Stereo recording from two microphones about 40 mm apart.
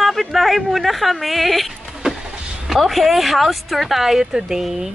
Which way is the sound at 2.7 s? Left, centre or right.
Centre.